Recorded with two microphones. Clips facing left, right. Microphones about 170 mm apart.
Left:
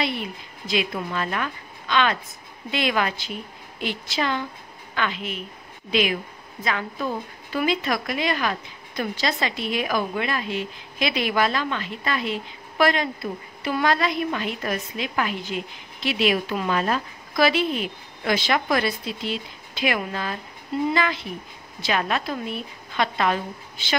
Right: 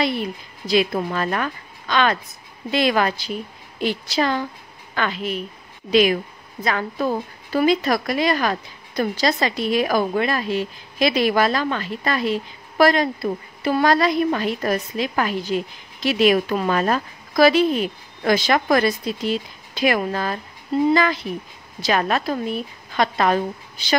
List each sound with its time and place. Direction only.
0.0 s a woman's voice: 40° right (ahead or behind)